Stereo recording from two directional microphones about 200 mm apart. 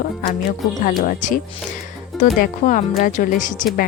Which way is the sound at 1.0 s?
40° left (ahead or behind).